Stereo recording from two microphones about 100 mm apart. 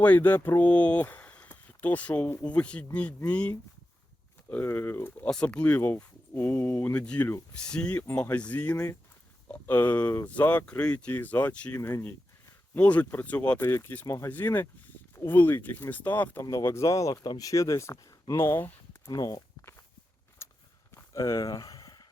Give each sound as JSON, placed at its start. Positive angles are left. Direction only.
{"t": 0.0, "sound": "speech", "side_deg": 20}
{"t": 5.3, "sound": "speech", "side_deg": 10}
{"t": 6.9, "sound": "speech", "side_deg": 10}
{"t": 11.8, "sound": "speech", "side_deg": 25}
{"t": 12.7, "sound": "speech", "side_deg": 15}
{"t": 13.6, "sound": "speech", "side_deg": 25}
{"t": 15.1, "sound": "a sound", "side_deg": 30}
{"t": 15.4, "sound": "speech", "side_deg": 20}
{"t": 16.4, "sound": "speech", "side_deg": 30}
{"t": 19.0, "sound": "speech", "side_deg": 40}
{"t": 20.4, "sound": "walk", "side_deg": 25}
{"t": 20.9, "sound": "a sound", "side_deg": 30}